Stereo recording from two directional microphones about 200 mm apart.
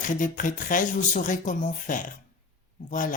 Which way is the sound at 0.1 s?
40° left (ahead or behind).